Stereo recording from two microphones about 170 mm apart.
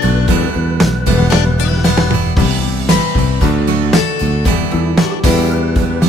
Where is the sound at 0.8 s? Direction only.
Centre (ahead or behind).